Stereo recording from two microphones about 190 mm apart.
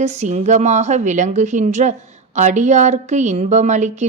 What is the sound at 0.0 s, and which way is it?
Speech, 35° right (ahead or behind).